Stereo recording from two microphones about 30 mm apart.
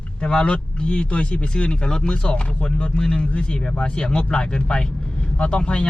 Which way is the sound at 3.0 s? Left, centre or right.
Left.